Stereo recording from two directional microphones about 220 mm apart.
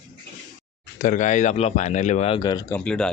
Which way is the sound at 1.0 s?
35° left (ahead or behind).